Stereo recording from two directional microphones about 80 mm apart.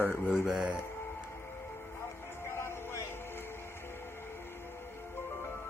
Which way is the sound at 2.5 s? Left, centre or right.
Left.